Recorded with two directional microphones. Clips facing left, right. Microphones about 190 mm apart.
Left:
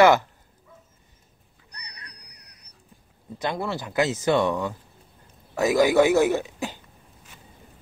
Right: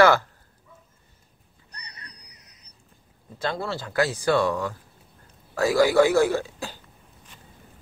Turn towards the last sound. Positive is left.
turn(degrees=20)  # may be behind; listen again after turning